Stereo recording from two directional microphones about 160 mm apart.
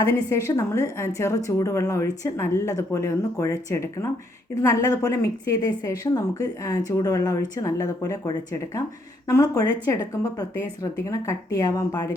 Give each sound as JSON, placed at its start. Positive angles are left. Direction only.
{"t": 0.3, "sound": "a woman's voice", "side_deg": 20}